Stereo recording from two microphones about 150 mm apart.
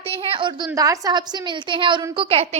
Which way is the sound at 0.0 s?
40° right (ahead or behind).